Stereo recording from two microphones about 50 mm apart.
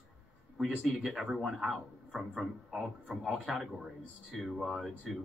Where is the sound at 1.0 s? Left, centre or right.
Centre.